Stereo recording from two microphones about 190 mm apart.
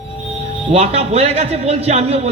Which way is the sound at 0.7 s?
30° right (ahead or behind).